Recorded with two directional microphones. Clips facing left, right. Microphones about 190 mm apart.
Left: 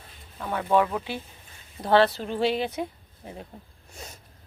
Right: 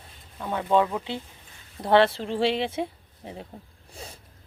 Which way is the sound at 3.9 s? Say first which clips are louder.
Right 2 dB; 30° right (ahead or behind).